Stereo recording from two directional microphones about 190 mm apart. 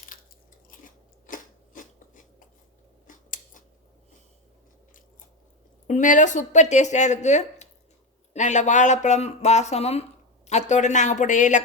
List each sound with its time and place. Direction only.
0.7 s biting: 45° left (ahead or behind)
3.1 s scissors: 45° left (ahead or behind)
5.9 s speech: 40° left (ahead or behind)